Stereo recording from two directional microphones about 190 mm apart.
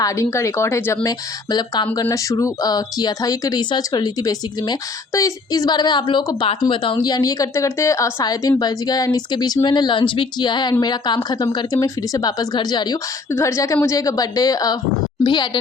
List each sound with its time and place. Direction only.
0.0 s a woman's voice: 15° left (ahead or behind)